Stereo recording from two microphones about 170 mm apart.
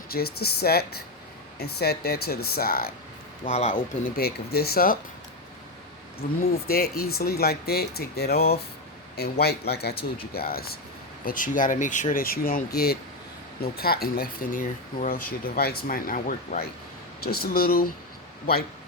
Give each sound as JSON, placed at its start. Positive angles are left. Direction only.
{"t": 0.1, "sound": "speech", "side_deg": 65}
{"t": 3.4, "sound": "speech", "side_deg": 45}
{"t": 4.1, "sound": "speech", "side_deg": 65}
{"t": 6.1, "sound": "speech", "side_deg": 65}
{"t": 11.3, "sound": "speech", "side_deg": 50}